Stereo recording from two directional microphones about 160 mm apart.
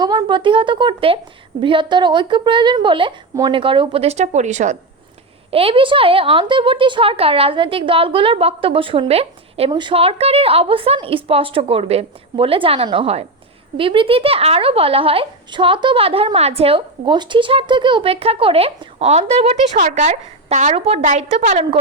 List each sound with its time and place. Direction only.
0.0 s a woman's voice: 25° right (ahead or behind); by 4.8 s 45° right (ahead or behind)
5.5 s speech: 35° right (ahead or behind)